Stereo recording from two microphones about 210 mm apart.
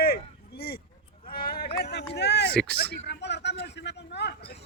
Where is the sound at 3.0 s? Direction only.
55° left (ahead or behind).